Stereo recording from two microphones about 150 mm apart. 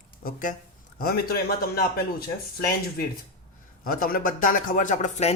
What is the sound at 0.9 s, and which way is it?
A man's voice, 85° left.